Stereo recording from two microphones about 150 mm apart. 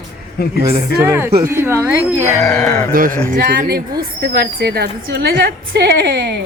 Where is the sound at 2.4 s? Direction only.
20° left (ahead or behind).